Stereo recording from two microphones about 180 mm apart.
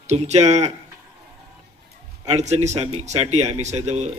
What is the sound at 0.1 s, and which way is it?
Speech, 40° right (ahead or behind).